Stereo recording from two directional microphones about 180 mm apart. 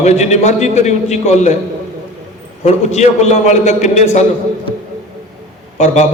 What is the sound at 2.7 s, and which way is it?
A man's voice, 40° left (ahead or behind).